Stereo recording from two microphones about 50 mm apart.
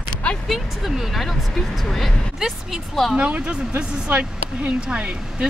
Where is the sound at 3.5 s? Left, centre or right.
Right.